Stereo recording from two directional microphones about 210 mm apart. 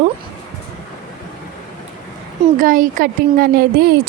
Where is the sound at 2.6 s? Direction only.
40° right (ahead or behind).